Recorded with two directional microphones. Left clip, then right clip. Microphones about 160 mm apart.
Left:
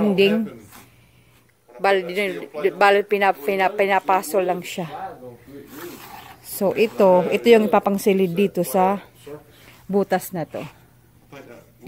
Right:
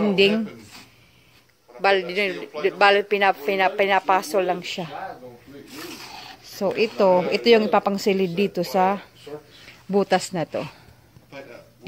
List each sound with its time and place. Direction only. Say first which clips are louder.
0.1 s speech: even; 10° left (ahead or behind)
1.8 s a woman's voice: even; 15° left (ahead or behind)
6.5 s a woman's voice: left 3 dB; 25° left (ahead or behind)
9.7 s a sound: even; centre (ahead or behind)